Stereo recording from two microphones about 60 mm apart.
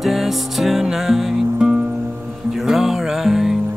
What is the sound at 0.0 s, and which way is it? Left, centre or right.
Music, centre.